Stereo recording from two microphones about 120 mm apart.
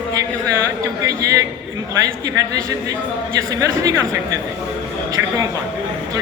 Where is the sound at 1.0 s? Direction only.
30° right (ahead or behind).